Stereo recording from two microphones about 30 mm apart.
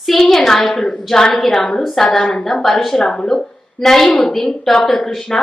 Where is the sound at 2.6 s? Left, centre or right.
Centre.